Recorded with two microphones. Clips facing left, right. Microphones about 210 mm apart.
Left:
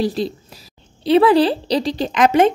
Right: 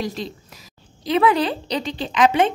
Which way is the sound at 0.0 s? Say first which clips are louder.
Left 7 dB; 35° left (ahead or behind).